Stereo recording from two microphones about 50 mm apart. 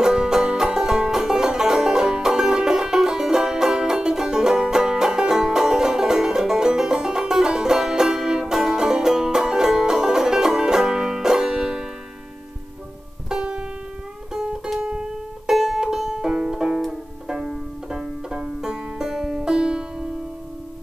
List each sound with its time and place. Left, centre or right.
0.0 s music: centre
13.3 s music: centre
18.3 s music: centre